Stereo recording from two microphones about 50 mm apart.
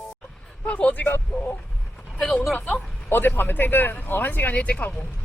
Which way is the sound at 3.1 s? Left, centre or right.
Left.